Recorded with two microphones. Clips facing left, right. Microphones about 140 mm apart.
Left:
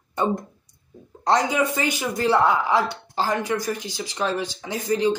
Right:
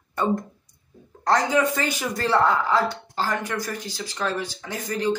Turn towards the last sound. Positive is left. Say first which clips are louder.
# left 4 dB
turn(degrees=20)  # may be behind; listen again after turning